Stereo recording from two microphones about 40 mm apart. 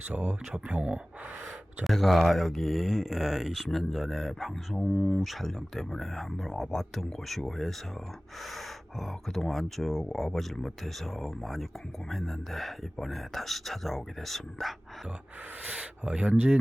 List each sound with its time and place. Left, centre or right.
0.1 s speech: right
1.8 s speech: centre
4.7 s speech: centre
5.1 s speech: centre
15.8 s speech: right